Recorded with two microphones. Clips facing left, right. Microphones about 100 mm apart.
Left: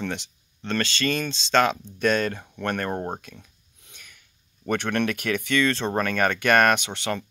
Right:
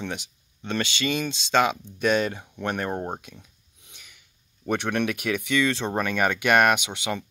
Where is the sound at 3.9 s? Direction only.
10° right (ahead or behind).